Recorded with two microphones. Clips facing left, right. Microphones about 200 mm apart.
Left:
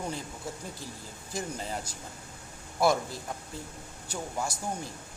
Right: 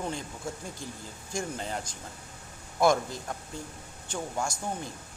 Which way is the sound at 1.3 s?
5° left (ahead or behind).